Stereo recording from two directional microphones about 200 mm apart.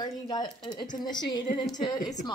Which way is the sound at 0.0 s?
20° left (ahead or behind).